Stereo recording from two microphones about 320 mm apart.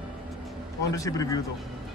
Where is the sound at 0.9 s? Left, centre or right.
Centre.